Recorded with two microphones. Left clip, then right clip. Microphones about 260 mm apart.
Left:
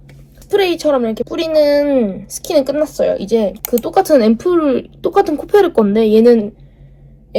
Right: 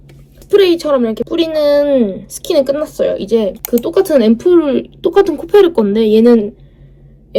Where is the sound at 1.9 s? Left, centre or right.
Left.